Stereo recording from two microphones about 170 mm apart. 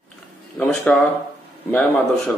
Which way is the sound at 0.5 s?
5° left (ahead or behind).